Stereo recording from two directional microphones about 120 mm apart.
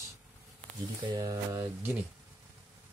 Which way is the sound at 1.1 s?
30° right (ahead or behind).